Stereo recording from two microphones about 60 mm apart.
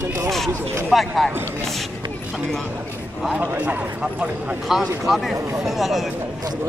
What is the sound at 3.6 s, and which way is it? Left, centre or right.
Speech, right.